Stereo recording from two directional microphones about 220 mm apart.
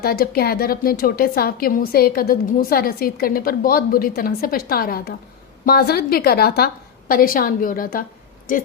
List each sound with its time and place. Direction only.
0.0 s a woman's voice: 45° left (ahead or behind)